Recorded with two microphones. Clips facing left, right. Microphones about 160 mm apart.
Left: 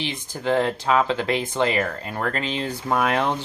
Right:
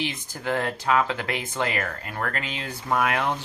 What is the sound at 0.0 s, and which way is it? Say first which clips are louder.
Speech: left 3 dB; 25° left (ahead or behind).